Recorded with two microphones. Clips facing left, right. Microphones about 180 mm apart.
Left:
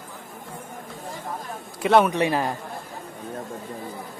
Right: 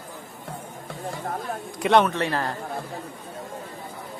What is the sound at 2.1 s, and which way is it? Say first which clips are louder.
Speech: left 3 dB; 15° left (ahead or behind).